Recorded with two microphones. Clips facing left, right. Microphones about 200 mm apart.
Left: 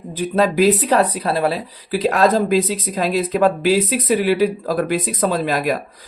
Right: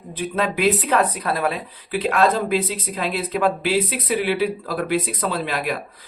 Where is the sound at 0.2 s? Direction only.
40° left (ahead or behind).